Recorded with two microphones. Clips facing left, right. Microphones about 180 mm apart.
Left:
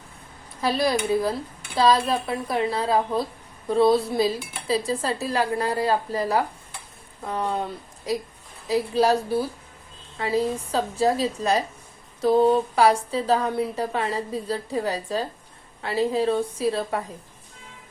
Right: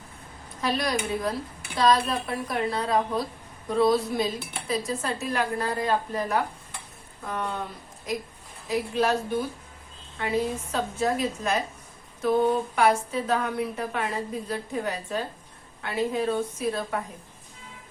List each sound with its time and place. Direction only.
0.8 s a woman's voice: 30° left (ahead or behind)
8.6 s a woman's voice: 35° left (ahead or behind)